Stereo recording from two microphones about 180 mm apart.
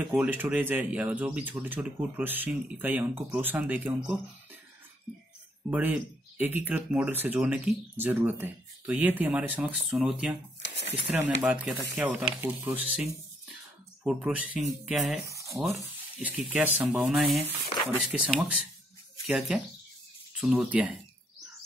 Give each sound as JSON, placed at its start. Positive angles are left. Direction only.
{"t": 0.0, "sound": "speech", "side_deg": -5}
{"t": 5.7, "sound": "speech", "side_deg": -10}
{"t": 10.6, "sound": "a sound", "side_deg": 70}
{"t": 11.1, "sound": "speech", "side_deg": -5}
{"t": 15.2, "sound": "speech", "side_deg": -15}